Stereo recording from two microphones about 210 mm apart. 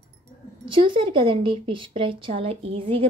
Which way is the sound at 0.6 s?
25° right (ahead or behind).